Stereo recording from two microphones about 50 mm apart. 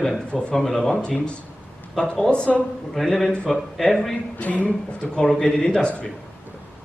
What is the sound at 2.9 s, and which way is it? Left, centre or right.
A man's voice, centre.